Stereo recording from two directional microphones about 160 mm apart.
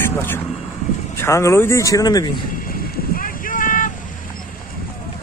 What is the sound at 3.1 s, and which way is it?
Boat, 60° left (ahead or behind).